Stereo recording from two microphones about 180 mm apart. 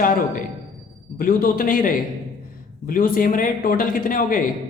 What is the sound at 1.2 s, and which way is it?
Speech, 50° left (ahead or behind).